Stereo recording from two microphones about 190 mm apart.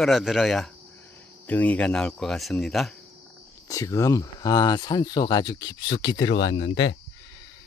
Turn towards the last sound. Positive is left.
turn(degrees=65)  # may be behind; listen again after turning